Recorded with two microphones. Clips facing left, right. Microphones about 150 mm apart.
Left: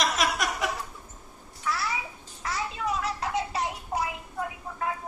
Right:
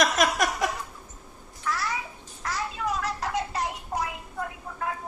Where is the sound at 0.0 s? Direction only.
50° right (ahead or behind).